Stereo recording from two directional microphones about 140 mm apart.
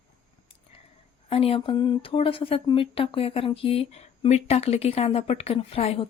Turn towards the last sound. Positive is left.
turn(degrees=45)  # may be behind; listen again after turning